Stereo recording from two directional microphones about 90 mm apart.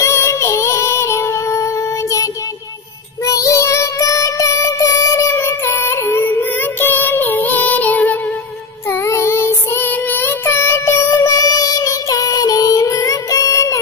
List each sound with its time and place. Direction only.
0.0 s music: 30° left (ahead or behind)
3.3 s music: 40° left (ahead or behind); by 8.2 s 15° left (ahead or behind)
8.8 s child singing: 30° left (ahead or behind)